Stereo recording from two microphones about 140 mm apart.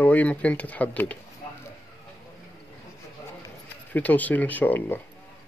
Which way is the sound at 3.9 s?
10° left (ahead or behind).